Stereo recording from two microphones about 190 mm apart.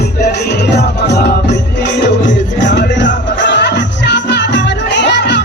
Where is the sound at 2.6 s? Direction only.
70° left (ahead or behind).